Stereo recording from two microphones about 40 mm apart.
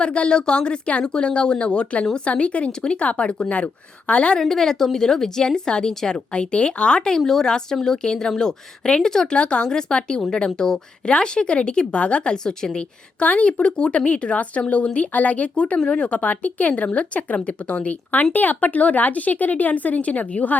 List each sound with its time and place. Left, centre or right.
0.0 s speech: left
3.5 s speech: left
4.4 s a woman's voice: centre
6.3 s speech: left
13.2 s speech: left
13.5 s speech: left
15.5 s speech: left